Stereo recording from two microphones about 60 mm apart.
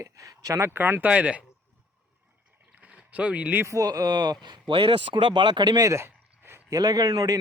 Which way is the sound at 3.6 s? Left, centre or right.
Right.